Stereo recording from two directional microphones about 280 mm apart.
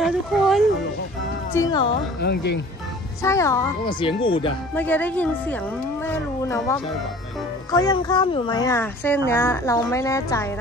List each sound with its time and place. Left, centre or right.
0.0 s speech: centre
1.5 s speech: centre
2.2 s speech: left
3.2 s speech: centre
4.7 s a woman's voice: centre